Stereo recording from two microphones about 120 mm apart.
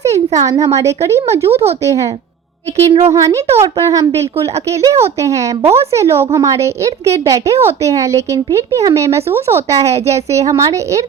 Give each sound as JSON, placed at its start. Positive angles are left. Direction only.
{"t": 0.3, "sound": "a woman's voice", "side_deg": -30}
{"t": 2.7, "sound": "a woman's voice", "side_deg": -60}
{"t": 3.1, "sound": "a woman's voice", "side_deg": -25}